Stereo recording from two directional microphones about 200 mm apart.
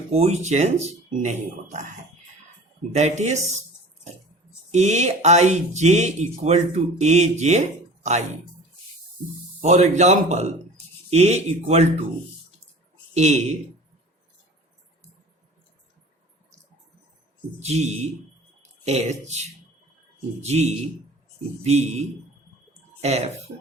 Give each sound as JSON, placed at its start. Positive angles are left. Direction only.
{"t": 0.1, "sound": "speech", "side_deg": -30}
{"t": 2.9, "sound": "speech", "side_deg": -35}
{"t": 4.7, "sound": "speech", "side_deg": -35}
{"t": 9.6, "sound": "speech", "side_deg": -35}
{"t": 13.1, "sound": "speech", "side_deg": -35}
{"t": 17.6, "sound": "speech", "side_deg": -35}